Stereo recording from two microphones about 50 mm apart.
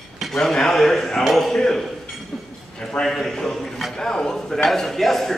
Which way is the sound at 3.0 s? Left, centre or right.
Centre.